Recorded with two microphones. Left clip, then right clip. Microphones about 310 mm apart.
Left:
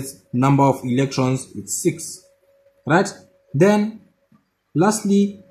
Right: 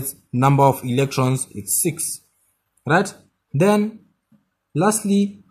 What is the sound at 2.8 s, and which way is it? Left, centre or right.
Speech, right.